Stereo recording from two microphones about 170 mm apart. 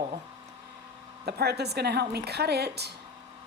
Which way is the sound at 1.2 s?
70° right (ahead or behind).